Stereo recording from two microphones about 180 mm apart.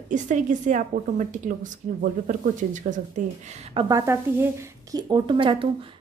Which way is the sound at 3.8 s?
15° right (ahead or behind).